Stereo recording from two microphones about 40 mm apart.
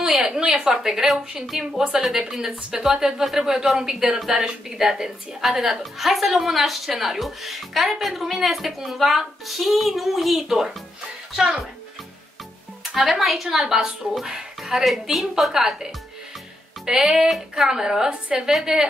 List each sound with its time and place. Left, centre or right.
0.0 s a woman's voice: centre
0.8 s a woman's voice: centre
11.3 s a child's voice: right
12.8 s a woman's voice: centre